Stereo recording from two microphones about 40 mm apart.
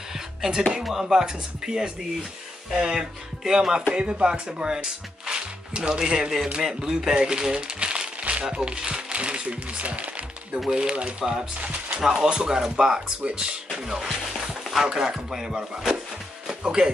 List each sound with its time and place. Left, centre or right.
0.5 s speech: centre
7.2 s crumpling: centre
8.5 s speech: right
10.7 s speech: centre
11.0 s speech: right
12.0 s speech: centre
13.2 s speech: right
14.0 s speech: centre
16.4 s music: centre